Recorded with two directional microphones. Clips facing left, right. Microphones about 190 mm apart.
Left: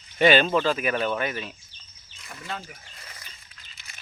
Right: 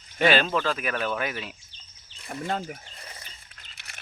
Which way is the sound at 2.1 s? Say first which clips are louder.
Right 9 dB; 30° right (ahead or behind).